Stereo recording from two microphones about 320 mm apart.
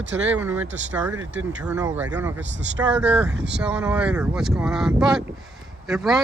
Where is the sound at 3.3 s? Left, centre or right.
Right.